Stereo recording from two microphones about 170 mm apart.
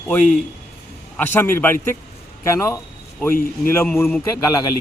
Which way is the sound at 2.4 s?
15° left (ahead or behind).